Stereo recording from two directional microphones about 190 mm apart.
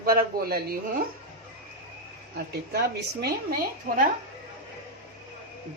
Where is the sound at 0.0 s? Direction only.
50° right (ahead or behind).